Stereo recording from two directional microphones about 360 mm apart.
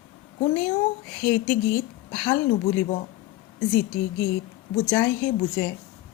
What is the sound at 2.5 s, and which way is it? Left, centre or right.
Speech, centre.